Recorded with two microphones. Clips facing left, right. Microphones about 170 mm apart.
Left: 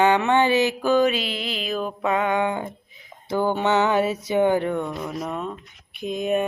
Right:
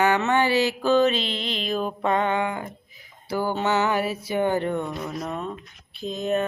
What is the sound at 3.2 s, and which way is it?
Speech, 20° left (ahead or behind).